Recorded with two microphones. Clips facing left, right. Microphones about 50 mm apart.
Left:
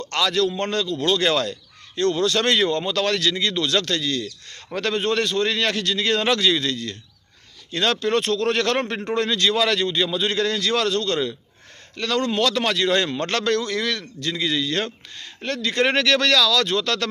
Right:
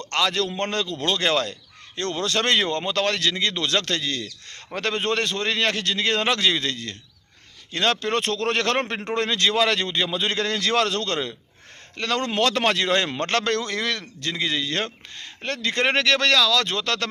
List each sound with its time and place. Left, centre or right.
0.1 s a man's voice: right
1.2 s speech: right
2.0 s a man's voice: right
9.1 s a man's voice: right
11.9 s a man's voice: right
12.2 s a man's voice: right